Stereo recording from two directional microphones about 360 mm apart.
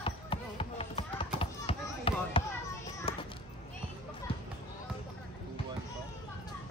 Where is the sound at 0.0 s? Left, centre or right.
Centre.